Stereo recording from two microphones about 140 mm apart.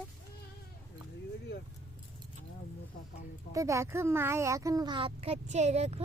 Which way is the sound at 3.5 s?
20° right (ahead or behind).